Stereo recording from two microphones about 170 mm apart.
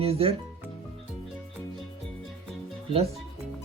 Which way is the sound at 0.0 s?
35° right (ahead or behind).